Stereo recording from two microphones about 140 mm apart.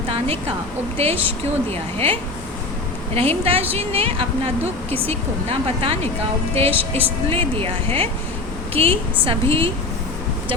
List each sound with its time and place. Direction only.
0.9 s a woman's voice: 45° right (ahead or behind)
3.2 s a woman's voice: 45° right (ahead or behind)